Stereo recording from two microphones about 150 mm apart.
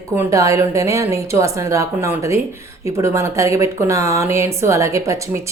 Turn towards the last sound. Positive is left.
turn(degrees=-20)  # may be behind; listen again after turning